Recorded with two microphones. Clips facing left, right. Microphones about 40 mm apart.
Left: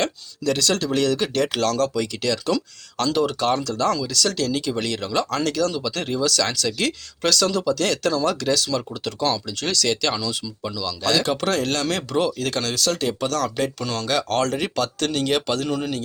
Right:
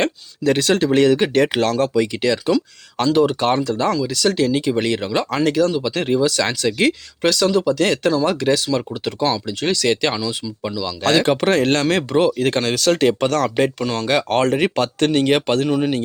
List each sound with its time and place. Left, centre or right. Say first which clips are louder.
0.0 s speech: right 4 dB; right
11.0 s speech: right 5 dB; right
12.8 s speech: right 8 dB; right